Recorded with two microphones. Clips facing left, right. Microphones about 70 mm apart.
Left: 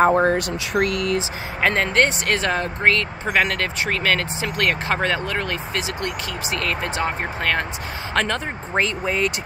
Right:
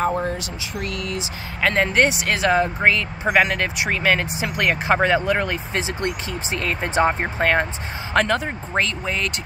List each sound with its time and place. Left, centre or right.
0.0 s speech: left
1.8 s speech: centre
8.1 s speech: centre
8.7 s speech: centre